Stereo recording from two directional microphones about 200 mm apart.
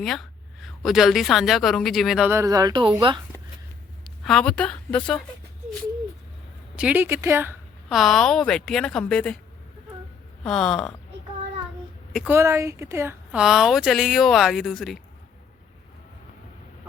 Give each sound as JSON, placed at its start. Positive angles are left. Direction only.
{"t": 0.0, "sound": "speech", "side_deg": 0}
{"t": 4.0, "sound": "a woman's voice", "side_deg": 5}
{"t": 6.7, "sound": "speech", "side_deg": -5}
{"t": 7.9, "sound": "speech", "side_deg": 0}
{"t": 10.4, "sound": "speech", "side_deg": 5}
{"t": 12.1, "sound": "speech", "side_deg": -10}